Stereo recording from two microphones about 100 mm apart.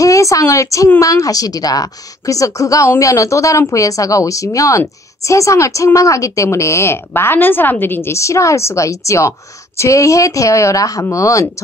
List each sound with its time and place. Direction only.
0.0 s a woman's voice: 35° left (ahead or behind)